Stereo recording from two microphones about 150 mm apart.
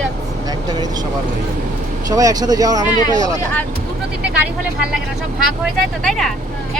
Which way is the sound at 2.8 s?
25° left (ahead or behind).